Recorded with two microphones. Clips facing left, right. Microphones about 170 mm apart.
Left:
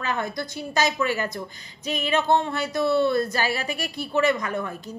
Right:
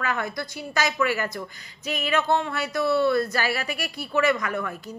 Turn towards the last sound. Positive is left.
turn(degrees=25)  # may be behind; listen again after turning